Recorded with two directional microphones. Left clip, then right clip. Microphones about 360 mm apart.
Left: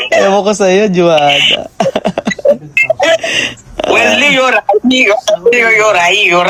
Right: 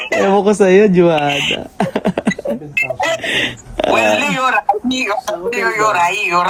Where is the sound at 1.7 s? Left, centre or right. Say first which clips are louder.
Left 5 dB; centre.